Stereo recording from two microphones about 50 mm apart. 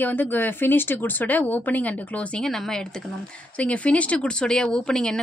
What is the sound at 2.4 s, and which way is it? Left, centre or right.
Speech, centre.